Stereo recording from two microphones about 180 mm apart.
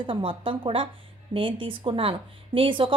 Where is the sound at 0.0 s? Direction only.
30° right (ahead or behind).